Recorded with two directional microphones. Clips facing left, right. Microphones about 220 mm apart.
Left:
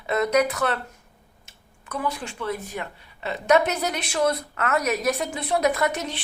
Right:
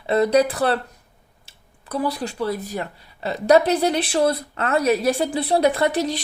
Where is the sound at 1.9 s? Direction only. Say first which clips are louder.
Right 5 dB; 35° right (ahead or behind).